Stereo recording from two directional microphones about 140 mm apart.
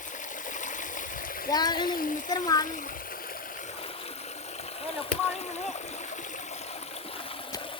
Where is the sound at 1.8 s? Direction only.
90° left.